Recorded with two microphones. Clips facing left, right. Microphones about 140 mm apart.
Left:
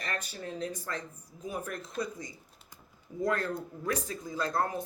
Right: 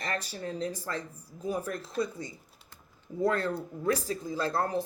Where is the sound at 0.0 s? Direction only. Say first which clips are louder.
Right 3 dB; 35° right (ahead or behind).